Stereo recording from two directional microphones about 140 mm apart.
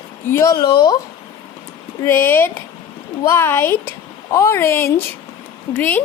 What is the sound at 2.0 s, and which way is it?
Speech, 15° left (ahead or behind).